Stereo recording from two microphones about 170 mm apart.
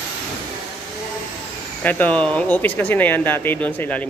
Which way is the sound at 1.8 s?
10° left (ahead or behind).